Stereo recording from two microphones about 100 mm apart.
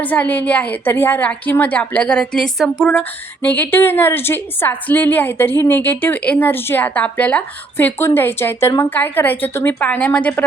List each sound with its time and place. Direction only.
0.0 s a woman's voice: 15° left (ahead or behind)
3.0 s a woman's voice: 15° left (ahead or behind)